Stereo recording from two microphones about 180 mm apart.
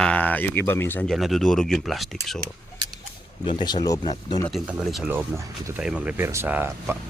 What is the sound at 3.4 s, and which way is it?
Speech, 25° left (ahead or behind).